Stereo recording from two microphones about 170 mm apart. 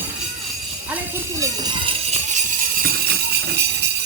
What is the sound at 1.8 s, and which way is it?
Music, 40° right (ahead or behind).